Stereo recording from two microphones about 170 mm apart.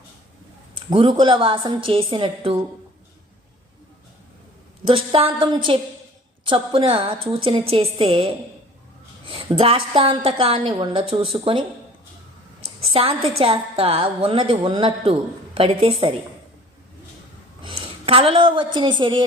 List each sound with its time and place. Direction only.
0.9 s a woman's voice: 25° right (ahead or behind)
4.9 s a woman's voice: 30° right (ahead or behind)
12.9 s a woman's voice: 35° right (ahead or behind)
17.6 s a woman's voice: 30° right (ahead or behind)